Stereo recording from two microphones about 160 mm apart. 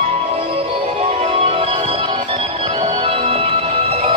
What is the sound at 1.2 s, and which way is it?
Music, 40° right (ahead or behind).